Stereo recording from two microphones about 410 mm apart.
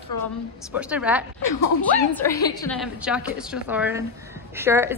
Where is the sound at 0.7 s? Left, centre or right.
Centre.